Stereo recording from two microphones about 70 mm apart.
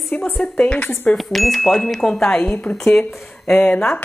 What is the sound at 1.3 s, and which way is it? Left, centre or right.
Speech, centre.